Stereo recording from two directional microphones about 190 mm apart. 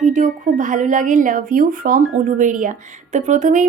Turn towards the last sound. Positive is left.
turn(degrees=-40)  # may be behind; listen again after turning